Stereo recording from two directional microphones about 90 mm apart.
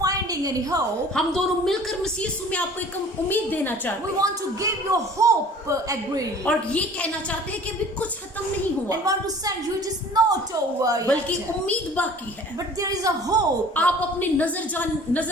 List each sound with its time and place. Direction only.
0.0 s a sound: 40° right (ahead or behind)
1.1 s a woman's voice: 5° left (ahead or behind)
3.2 s a woman's voice: 20° left (ahead or behind)
4.2 s a man's voice: 40° right (ahead or behind)
6.4 s a woman's voice: 15° left (ahead or behind)
8.9 s a woman's voice: 40° right (ahead or behind)
10.8 s a woman's voice: 40° right (ahead or behind)
11.6 s a woman's voice: 15° left (ahead or behind)
12.8 s a man's voice: 40° right (ahead or behind)
13.7 s a woman's voice: 15° left (ahead or behind)